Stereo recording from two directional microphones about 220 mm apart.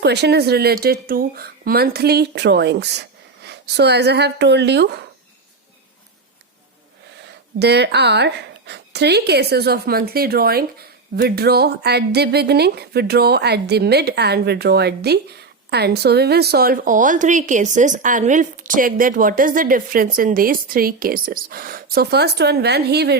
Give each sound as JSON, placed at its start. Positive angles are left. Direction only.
{"t": 0.0, "sound": "speech", "side_deg": -50}
{"t": 7.6, "sound": "speech", "side_deg": -50}